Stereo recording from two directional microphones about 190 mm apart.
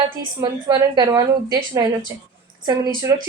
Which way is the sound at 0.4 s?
20° right (ahead or behind).